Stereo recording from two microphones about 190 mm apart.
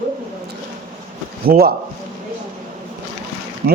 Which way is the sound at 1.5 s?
55° right (ahead or behind).